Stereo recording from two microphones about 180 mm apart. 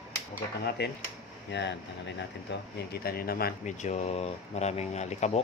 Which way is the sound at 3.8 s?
40° left (ahead or behind).